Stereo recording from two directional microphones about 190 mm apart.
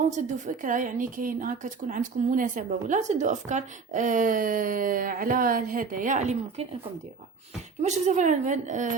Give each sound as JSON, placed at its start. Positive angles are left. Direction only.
{"t": 0.0, "sound": "a woman's voice", "side_deg": -40}
{"t": 7.8, "sound": "a woman's voice", "side_deg": -40}